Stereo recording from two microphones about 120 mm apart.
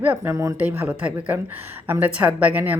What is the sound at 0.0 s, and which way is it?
A woman's voice, 15° right (ahead or behind).